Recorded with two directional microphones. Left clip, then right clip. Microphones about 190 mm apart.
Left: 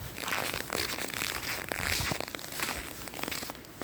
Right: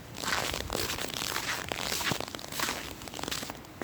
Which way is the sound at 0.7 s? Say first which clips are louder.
Even; 15° left (ahead or behind).